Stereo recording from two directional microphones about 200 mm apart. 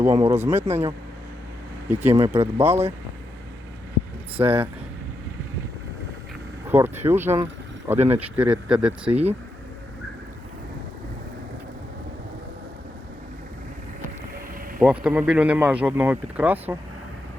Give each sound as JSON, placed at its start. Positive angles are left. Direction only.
{"t": 0.0, "sound": "speech", "side_deg": -15}
{"t": 4.4, "sound": "speech", "side_deg": -10}
{"t": 6.7, "sound": "speech", "side_deg": -10}
{"t": 14.8, "sound": "speech", "side_deg": -5}